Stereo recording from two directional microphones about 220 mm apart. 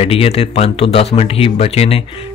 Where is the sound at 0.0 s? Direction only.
25° left (ahead or behind).